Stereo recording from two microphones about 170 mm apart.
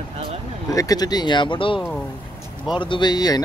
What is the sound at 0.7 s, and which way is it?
Speech, 20° left (ahead or behind).